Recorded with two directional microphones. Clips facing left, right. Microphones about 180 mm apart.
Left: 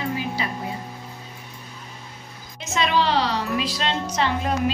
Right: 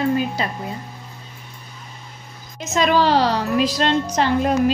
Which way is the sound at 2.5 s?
45° right (ahead or behind).